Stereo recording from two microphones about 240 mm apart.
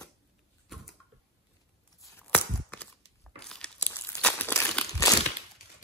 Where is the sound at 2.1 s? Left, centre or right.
Centre.